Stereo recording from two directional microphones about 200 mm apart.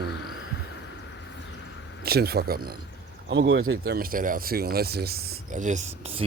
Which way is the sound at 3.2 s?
65° right (ahead or behind).